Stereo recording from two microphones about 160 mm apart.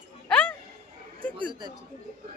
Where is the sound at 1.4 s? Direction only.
30° right (ahead or behind).